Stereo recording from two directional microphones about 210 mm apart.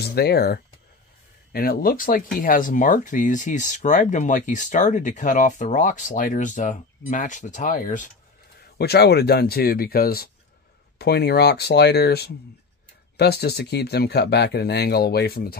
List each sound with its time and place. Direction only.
0.0 s speech: 50° left (ahead or behind)
8.7 s speech: 50° left (ahead or behind)